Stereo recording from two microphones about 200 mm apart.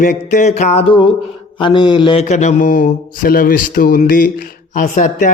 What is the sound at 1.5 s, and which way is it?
Mantra, 25° left (ahead or behind).